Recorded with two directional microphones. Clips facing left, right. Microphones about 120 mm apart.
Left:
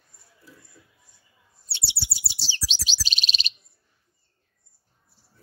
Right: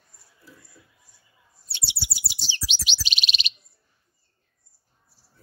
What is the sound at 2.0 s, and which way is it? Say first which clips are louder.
Chirp: right 1 dB; 30° left (ahead or behind).